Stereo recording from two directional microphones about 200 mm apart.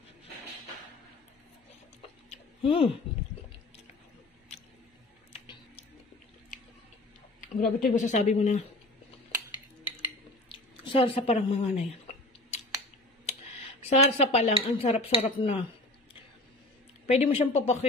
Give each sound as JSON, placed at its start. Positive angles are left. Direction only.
{"t": 2.0, "sound": "a sound", "side_deg": 30}
{"t": 5.3, "sound": "music", "side_deg": 30}
{"t": 7.3, "sound": "speech", "side_deg": 45}
{"t": 10.5, "sound": "a sound", "side_deg": 25}
{"t": 13.2, "sound": "speech", "side_deg": 35}
{"t": 17.0, "sound": "speech", "side_deg": 35}